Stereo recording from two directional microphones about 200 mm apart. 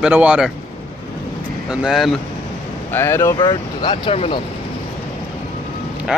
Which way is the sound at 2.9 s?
10° left (ahead or behind).